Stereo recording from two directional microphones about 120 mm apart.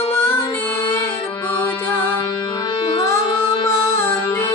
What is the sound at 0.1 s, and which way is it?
Female singing, 20° left (ahead or behind).